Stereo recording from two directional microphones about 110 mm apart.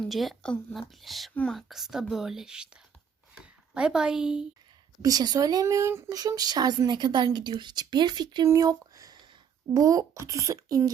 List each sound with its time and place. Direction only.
0.0 s speech: centre (ahead or behind)
5.0 s speech: 35° right (ahead or behind)
6.1 s speech: 35° right (ahead or behind)
8.4 s a sound: 30° right (ahead or behind)
9.7 s speech: 35° right (ahead or behind)